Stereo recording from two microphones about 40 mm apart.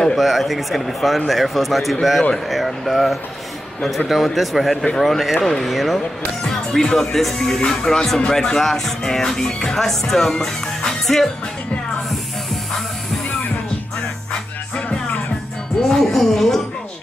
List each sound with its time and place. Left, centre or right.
0.2 s speech: centre
6.4 s speech: centre
10.9 s music: centre
14.8 s music: left
15.8 s speech: centre